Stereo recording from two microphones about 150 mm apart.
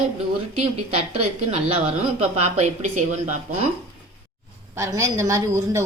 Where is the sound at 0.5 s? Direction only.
45° right (ahead or behind).